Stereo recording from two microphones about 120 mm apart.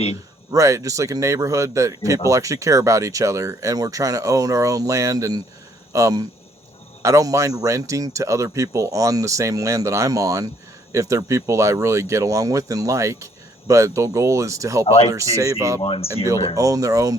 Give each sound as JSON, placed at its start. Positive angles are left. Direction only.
{"t": 0.5, "sound": "speech", "side_deg": -30}
{"t": 15.8, "sound": "speech", "side_deg": 45}
{"t": 16.6, "sound": "speech", "side_deg": -30}